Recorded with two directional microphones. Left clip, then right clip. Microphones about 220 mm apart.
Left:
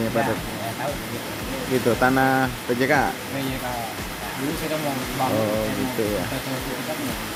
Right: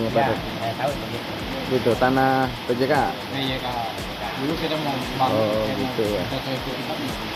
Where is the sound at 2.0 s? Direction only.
30° left (ahead or behind).